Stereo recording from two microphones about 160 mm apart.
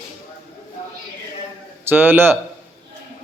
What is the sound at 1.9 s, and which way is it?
Speech, 15° right (ahead or behind).